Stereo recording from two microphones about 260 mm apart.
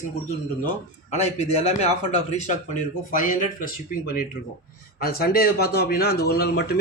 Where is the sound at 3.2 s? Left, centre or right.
Left.